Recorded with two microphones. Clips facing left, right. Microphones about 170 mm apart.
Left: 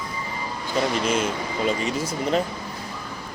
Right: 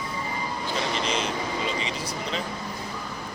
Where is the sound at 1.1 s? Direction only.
50° left (ahead or behind).